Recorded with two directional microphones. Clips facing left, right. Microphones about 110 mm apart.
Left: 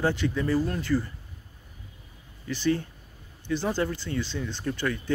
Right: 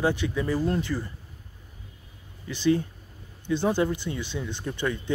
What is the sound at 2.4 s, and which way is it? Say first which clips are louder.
Speech: right 3 dB; 15° right (ahead or behind).